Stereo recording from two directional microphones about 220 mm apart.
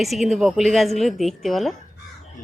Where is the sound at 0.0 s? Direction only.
Centre (ahead or behind).